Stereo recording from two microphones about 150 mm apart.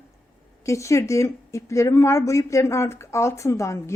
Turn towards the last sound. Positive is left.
turn(degrees=20)  # may be behind; listen again after turning